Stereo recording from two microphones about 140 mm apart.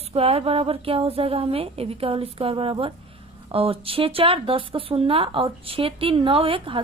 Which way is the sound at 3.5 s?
40° right (ahead or behind).